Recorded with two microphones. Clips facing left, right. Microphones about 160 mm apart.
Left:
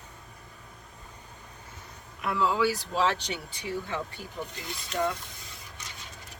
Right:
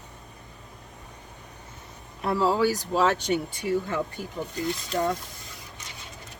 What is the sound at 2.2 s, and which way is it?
Speech, 40° right (ahead or behind).